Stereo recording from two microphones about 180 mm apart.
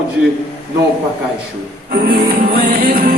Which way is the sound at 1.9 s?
60° right (ahead or behind).